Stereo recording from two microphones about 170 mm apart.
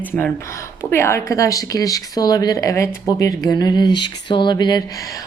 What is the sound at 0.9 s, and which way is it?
A woman's voice, 15° left (ahead or behind).